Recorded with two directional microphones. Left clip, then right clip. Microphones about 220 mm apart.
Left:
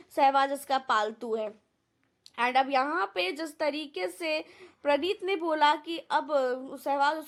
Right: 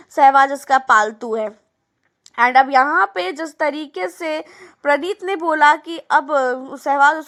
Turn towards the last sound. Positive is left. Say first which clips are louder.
# right 13 dB
turn(degrees=-20)  # may be behind; listen again after turning